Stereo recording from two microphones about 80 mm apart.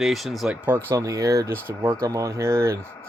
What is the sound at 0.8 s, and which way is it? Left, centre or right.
Speech, right.